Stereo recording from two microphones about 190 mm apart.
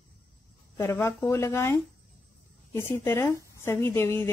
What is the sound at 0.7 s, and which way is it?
Speech, 15° left (ahead or behind).